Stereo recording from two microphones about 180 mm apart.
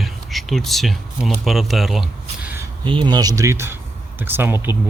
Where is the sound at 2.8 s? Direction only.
25° right (ahead or behind).